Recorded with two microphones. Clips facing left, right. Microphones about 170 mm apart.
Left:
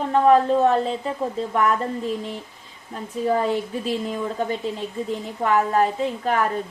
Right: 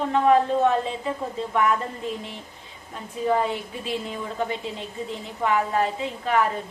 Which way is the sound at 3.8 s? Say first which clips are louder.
Left 5 dB; 40° left (ahead or behind).